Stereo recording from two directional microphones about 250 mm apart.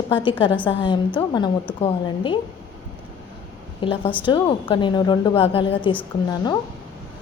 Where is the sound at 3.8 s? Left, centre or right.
Left.